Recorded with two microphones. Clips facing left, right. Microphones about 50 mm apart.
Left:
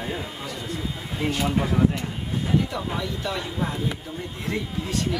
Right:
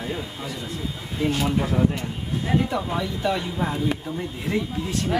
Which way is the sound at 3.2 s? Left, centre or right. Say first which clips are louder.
Right 6 dB; centre.